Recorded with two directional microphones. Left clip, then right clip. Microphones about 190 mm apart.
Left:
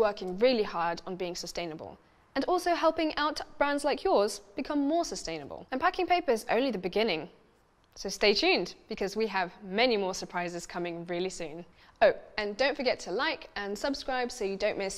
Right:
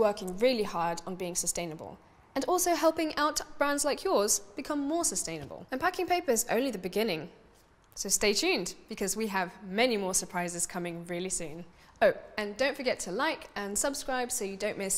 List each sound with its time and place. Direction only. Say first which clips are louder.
0.0 s a woman's voice: left 1 dB; 40° left (ahead or behind)